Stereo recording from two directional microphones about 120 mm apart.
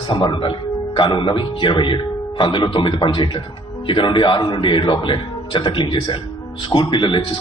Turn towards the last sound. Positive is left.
turn(degrees=40)  # may be behind; listen again after turning